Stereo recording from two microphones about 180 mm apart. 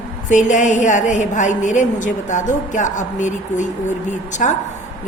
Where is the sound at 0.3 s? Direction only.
45° left (ahead or behind).